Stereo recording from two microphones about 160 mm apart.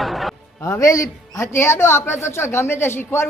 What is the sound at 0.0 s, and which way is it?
Music, centre (ahead or behind).